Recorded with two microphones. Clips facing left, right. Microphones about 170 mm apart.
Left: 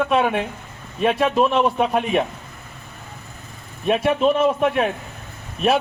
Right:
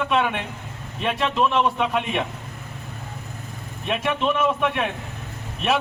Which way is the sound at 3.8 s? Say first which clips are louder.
Left 6 dB; 45° left (ahead or behind).